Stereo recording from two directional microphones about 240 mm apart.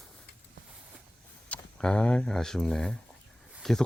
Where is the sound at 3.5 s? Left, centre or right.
Centre.